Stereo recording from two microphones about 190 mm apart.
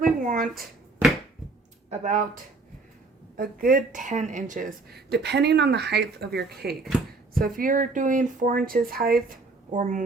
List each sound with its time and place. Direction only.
0.2 s a sound: 45° right (ahead or behind)
0.4 s speech: centre (ahead or behind)
1.9 s a woman's voice: 40° right (ahead or behind)